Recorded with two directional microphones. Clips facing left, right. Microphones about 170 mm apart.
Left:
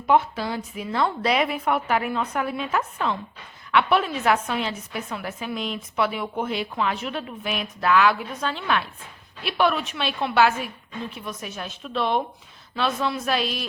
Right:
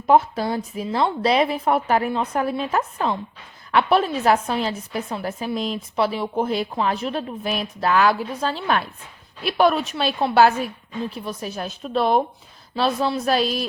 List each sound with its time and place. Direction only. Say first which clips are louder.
0.1 s a woman's voice: right 3 dB; 40° right (ahead or behind)
0.9 s a woman's voice: right 3 dB; 30° right (ahead or behind)